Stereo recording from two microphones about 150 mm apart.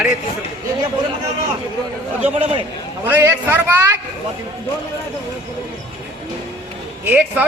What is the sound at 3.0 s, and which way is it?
Speech, 15° right (ahead or behind).